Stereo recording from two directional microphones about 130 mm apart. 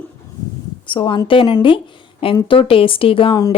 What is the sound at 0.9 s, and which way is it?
A woman's voice, 40° left (ahead or behind).